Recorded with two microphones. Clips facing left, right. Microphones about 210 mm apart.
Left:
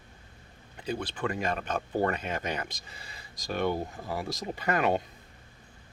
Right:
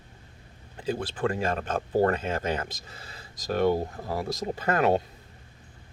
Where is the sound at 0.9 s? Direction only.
35° right (ahead or behind).